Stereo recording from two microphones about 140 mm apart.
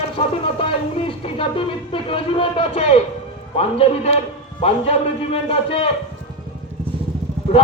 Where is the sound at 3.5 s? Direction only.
45° left (ahead or behind).